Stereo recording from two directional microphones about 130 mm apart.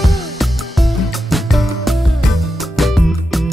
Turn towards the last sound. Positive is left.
turn(degrees=0)  # may be behind; listen again after turning